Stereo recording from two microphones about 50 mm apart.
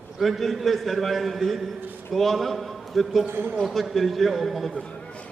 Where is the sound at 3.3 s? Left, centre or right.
Right.